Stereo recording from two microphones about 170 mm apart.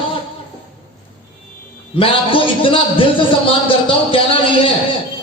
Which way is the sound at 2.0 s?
30° left (ahead or behind).